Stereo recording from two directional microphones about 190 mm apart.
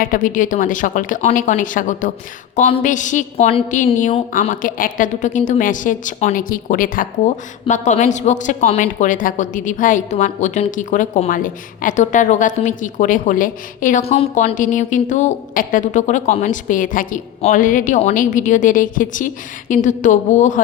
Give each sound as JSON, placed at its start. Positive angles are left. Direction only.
{"t": 0.0, "sound": "a woman's voice", "side_deg": 45}
{"t": 14.0, "sound": "a woman's voice", "side_deg": 35}